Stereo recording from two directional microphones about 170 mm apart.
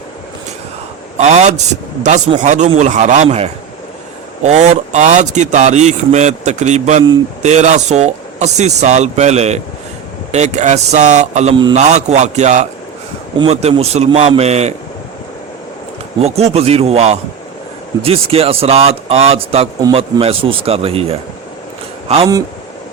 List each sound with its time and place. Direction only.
1.2 s speech: 40° right (ahead or behind)
16.2 s speech: 35° right (ahead or behind)